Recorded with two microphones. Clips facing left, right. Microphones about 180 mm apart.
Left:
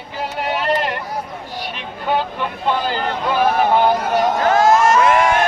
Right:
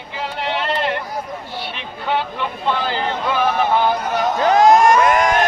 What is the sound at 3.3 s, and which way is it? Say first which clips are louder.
Music: left 3 dB; 45° left (ahead or behind).